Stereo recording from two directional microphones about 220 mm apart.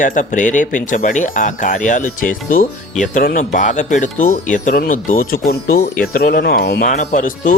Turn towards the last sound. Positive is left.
turn(degrees=35)  # may be behind; listen again after turning